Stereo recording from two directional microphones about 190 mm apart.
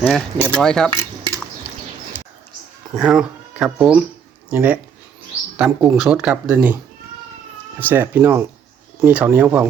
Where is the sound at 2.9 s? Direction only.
5° right (ahead or behind).